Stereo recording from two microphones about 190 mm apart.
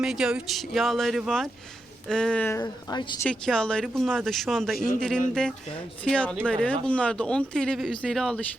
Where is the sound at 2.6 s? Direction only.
20° left (ahead or behind).